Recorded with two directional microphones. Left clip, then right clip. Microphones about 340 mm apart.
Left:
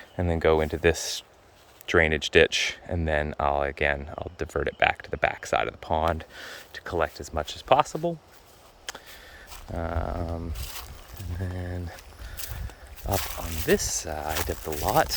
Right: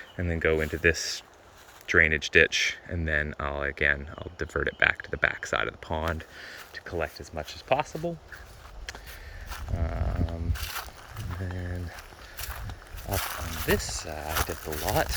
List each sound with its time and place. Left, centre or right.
0.2 s speech: centre
9.7 s speech: centre
10.5 s speech: centre
11.4 s speech: centre
13.1 s speech: centre
14.1 s speech: centre
14.5 s speech: centre